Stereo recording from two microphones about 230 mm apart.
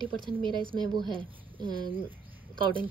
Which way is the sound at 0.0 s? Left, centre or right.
Right.